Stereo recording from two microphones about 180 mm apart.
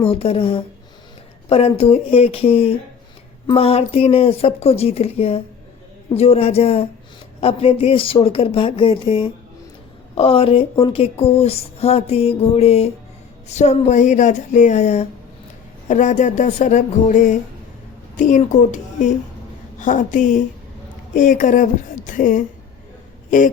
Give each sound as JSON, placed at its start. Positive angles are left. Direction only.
{"t": 0.0, "sound": "speech", "side_deg": 30}